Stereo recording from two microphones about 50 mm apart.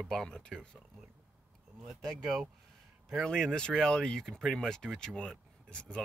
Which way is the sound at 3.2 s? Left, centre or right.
Centre.